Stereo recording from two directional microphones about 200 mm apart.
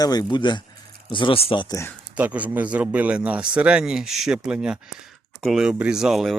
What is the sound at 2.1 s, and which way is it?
Speech, 5° right (ahead or behind).